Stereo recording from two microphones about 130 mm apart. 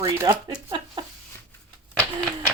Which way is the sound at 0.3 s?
35° right (ahead or behind).